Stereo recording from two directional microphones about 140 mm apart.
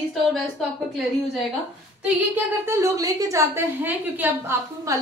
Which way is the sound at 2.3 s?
20° right (ahead or behind).